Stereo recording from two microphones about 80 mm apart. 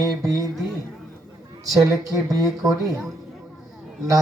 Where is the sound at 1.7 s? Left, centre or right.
Right.